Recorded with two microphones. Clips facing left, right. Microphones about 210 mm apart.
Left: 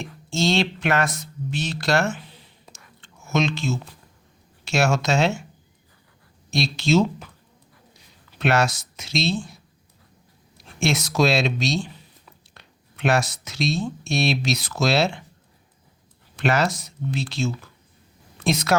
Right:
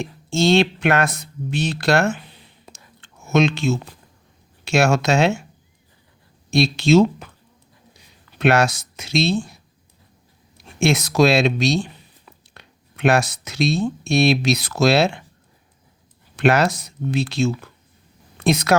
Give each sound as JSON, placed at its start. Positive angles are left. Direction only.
{"t": 0.3, "sound": "speech", "side_deg": -60}
{"t": 3.0, "sound": "typing", "side_deg": -65}
{"t": 4.6, "sound": "speech", "side_deg": -60}
{"t": 6.5, "sound": "speech", "side_deg": -60}
{"t": 8.4, "sound": "speech", "side_deg": -60}
{"t": 10.8, "sound": "speech", "side_deg": -60}
{"t": 16.3, "sound": "speech", "side_deg": -60}